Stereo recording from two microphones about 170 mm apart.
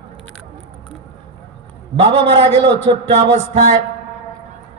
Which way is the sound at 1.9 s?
35° right (ahead or behind).